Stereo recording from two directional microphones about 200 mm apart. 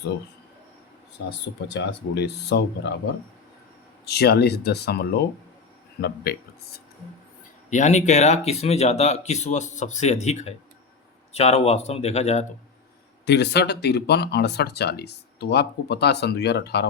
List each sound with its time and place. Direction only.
1.3 s speech: 60° left (ahead or behind)
4.0 s speech: 55° left (ahead or behind)
6.3 s speech: 50° left (ahead or behind)
7.7 s speech: 35° left (ahead or behind)
13.2 s speech: 60° left (ahead or behind)